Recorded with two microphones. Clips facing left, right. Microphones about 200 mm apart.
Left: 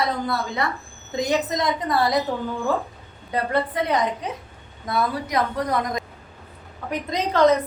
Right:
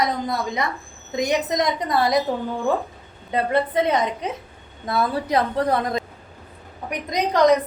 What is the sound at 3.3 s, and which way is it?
A woman's voice, 20° right (ahead or behind).